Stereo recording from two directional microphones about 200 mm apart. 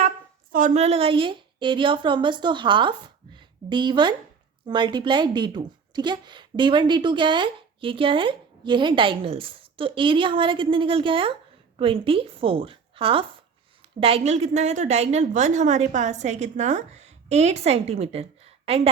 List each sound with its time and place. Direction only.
0.5 s a woman's voice: 35° right (ahead or behind)